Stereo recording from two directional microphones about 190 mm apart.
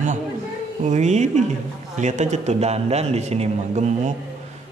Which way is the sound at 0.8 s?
35° right (ahead or behind).